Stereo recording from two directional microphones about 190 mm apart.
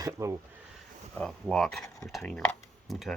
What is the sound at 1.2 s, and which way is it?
Speech, 5° left (ahead or behind).